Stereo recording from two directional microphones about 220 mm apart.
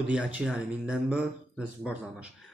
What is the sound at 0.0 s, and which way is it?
A man's voice, 5° right (ahead or behind).